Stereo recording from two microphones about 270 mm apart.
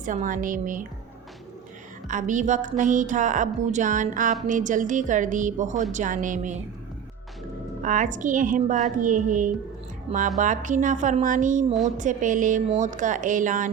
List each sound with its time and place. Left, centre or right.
0.0 s a woman's voice: right
2.0 s a woman's voice: right
7.8 s a woman's voice: right